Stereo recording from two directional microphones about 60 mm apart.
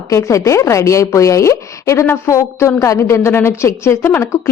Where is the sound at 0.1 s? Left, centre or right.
Left.